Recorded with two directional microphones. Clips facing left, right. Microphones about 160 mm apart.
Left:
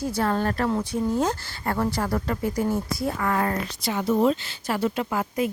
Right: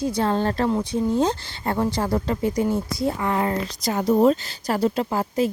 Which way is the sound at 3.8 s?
40° right (ahead or behind).